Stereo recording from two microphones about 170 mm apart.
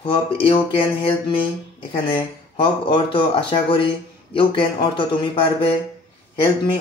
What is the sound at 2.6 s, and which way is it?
Speech, 30° left (ahead or behind).